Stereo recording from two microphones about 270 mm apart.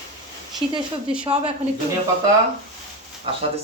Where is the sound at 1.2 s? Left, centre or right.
Right.